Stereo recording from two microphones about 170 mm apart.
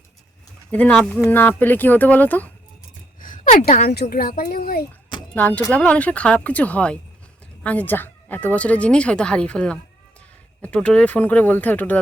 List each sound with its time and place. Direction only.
0.7 s speech: 5° left (ahead or behind)
3.2 s a woman's voice: 50° left (ahead or behind)
5.3 s speech: 10° left (ahead or behind)